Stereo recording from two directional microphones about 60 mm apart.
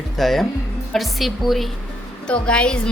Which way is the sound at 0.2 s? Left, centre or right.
Centre.